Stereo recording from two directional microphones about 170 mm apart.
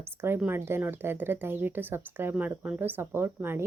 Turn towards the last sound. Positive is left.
turn(degrees=-15)  # may be behind; listen again after turning